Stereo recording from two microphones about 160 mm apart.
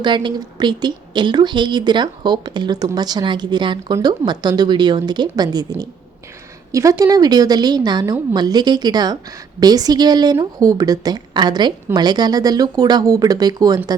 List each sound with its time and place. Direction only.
0.0 s speech: 30° right (ahead or behind)